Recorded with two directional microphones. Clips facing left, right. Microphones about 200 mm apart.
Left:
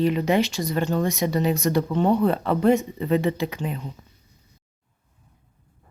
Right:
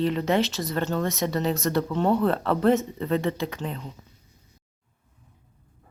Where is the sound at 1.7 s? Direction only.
15° left (ahead or behind).